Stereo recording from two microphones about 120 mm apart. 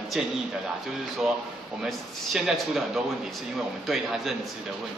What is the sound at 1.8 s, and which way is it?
A man's voice, centre (ahead or behind).